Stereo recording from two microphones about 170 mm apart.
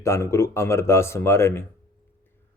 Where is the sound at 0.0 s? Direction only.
15° left (ahead or behind).